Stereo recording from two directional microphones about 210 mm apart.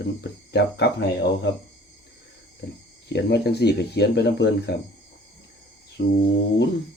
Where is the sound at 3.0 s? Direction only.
55° left (ahead or behind).